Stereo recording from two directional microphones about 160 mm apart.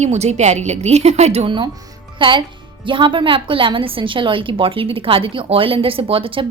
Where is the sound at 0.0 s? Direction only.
45° right (ahead or behind).